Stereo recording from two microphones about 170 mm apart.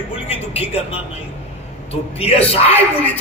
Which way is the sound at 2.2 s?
35° left (ahead or behind).